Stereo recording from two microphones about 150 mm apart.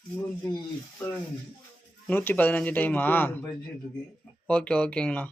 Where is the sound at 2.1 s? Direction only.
10° left (ahead or behind).